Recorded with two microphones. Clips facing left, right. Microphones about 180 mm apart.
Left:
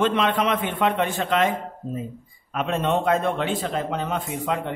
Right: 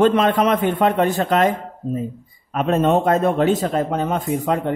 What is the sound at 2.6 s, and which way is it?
Speech, 45° right (ahead or behind).